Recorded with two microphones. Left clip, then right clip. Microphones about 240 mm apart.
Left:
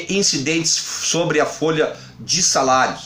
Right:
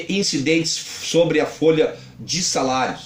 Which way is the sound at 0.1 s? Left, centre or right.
Left.